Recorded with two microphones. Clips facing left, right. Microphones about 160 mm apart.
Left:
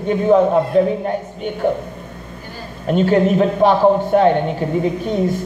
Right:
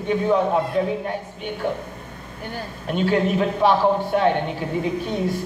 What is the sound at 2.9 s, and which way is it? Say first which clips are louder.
A man's voice: left 6 dB; 45° left (ahead or behind).